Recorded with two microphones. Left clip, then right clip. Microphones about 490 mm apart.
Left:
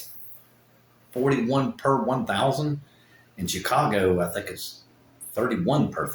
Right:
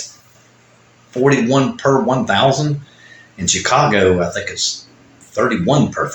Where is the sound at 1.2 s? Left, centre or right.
Left.